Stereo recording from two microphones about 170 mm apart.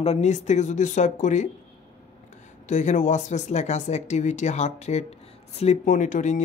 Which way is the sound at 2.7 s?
45° left (ahead or behind).